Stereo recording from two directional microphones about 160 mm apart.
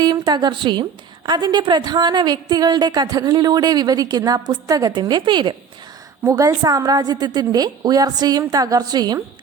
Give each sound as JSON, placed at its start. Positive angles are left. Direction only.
{"t": 0.0, "sound": "a woman's voice", "side_deg": -25}